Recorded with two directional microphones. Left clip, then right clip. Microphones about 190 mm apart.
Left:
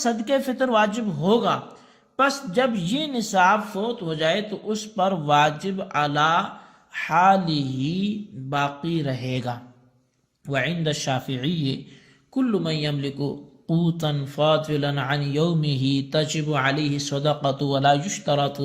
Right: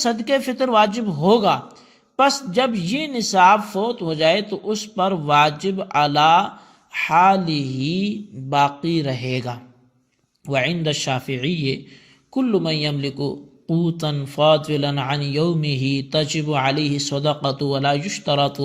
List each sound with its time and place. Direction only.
0.0 s a man's voice: 30° right (ahead or behind)
12.3 s a man's voice: 25° right (ahead or behind)